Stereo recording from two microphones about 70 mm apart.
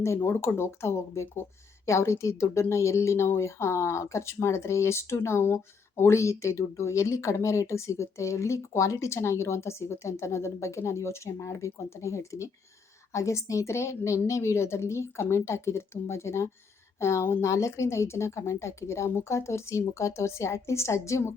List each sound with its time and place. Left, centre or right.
0.3 s a woman's voice: left